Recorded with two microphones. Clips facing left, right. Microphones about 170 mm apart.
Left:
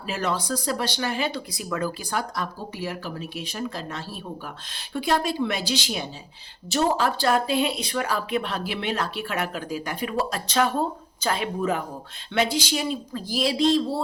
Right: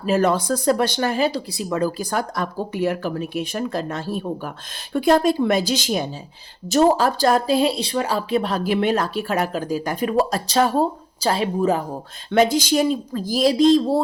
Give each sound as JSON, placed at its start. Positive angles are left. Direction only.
{"t": 0.0, "sound": "speech", "side_deg": -45}
{"t": 1.5, "sound": "speech", "side_deg": -30}
{"t": 2.0, "sound": "speech", "side_deg": -45}
{"t": 12.3, "sound": "speech", "side_deg": -45}